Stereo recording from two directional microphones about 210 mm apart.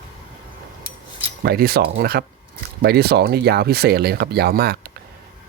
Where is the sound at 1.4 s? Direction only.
45° right (ahead or behind).